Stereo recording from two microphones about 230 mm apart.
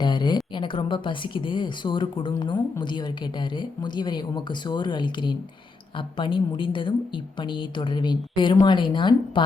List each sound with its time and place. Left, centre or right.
0.0 s a woman's voice: centre